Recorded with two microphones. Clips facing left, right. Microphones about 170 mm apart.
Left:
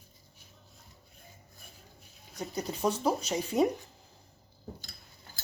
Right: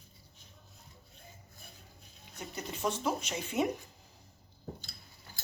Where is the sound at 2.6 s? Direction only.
35° left (ahead or behind).